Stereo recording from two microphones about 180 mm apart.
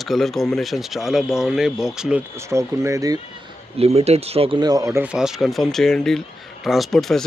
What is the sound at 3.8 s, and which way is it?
Speech, 35° right (ahead or behind).